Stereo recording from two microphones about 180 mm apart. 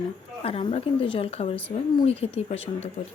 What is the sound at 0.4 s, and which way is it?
A woman's voice, 30° left (ahead or behind).